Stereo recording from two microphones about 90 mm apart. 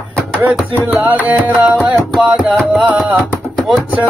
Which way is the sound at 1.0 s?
20° right (ahead or behind).